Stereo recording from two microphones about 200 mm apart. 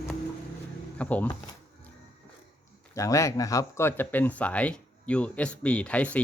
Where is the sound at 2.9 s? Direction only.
15° left (ahead or behind).